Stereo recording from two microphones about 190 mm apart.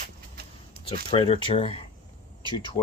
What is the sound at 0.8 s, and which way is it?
Speech, 25° left (ahead or behind).